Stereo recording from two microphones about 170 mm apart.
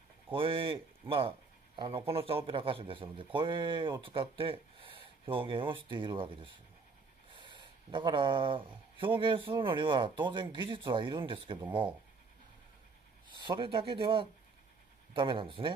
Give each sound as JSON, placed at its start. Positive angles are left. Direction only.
{"t": 0.3, "sound": "speech", "side_deg": -30}
{"t": 13.4, "sound": "speech", "side_deg": -30}